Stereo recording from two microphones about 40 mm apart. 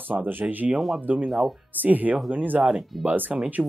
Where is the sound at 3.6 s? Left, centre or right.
Centre.